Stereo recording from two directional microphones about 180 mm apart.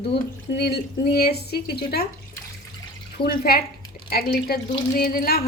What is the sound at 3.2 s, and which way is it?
Speech, 60° left (ahead or behind).